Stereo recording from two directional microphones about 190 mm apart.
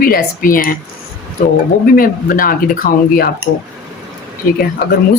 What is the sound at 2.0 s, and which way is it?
Speech, 50° left (ahead or behind).